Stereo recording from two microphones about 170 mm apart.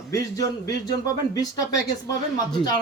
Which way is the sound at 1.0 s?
20° left (ahead or behind).